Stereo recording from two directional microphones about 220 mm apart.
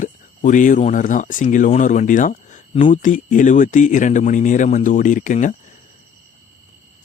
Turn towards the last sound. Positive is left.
turn(degrees=35)  # may be behind; listen again after turning